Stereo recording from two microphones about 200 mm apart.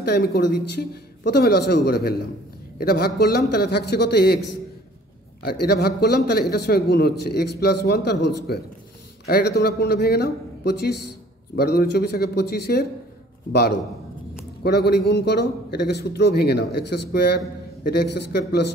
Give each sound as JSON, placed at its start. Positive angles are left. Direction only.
{"t": 0.0, "sound": "a man's voice", "side_deg": 55}
{"t": 5.4, "sound": "a man's voice", "side_deg": 55}